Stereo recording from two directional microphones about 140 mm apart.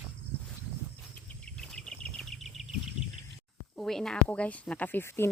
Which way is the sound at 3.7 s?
5° left (ahead or behind).